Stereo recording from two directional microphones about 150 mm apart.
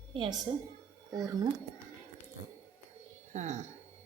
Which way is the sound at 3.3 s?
50° right (ahead or behind).